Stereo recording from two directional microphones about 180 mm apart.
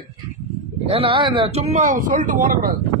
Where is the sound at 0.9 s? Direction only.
30° right (ahead or behind).